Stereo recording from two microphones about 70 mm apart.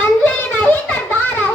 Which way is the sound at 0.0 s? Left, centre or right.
Left.